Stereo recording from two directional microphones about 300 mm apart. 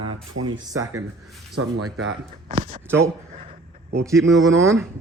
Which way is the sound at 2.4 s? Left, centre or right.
Right.